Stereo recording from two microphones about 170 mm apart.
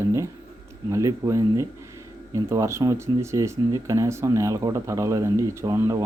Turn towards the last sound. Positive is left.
turn(degrees=-20)  # may be behind; listen again after turning